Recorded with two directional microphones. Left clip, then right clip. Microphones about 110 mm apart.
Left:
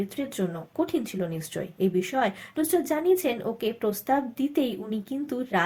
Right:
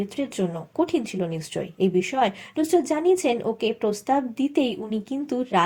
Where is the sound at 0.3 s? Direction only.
20° right (ahead or behind).